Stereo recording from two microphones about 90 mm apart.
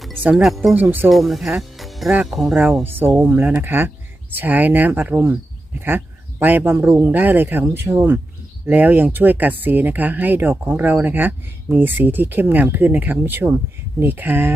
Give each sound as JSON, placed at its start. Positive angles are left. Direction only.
{"t": 0.2, "sound": "speech", "side_deg": -20}
{"t": 0.4, "sound": "speech", "side_deg": 0}
{"t": 0.8, "sound": "speech", "side_deg": -20}
{"t": 1.1, "sound": "speech", "side_deg": 0}
{"t": 1.8, "sound": "music", "side_deg": 0}
{"t": 2.2, "sound": "speech", "side_deg": 0}
{"t": 2.8, "sound": "speech", "side_deg": -20}
{"t": 6.4, "sound": "speech", "side_deg": -20}